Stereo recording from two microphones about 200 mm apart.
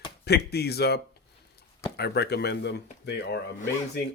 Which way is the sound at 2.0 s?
55° left (ahead or behind).